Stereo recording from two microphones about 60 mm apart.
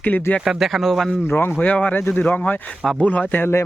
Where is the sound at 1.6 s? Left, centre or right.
Left.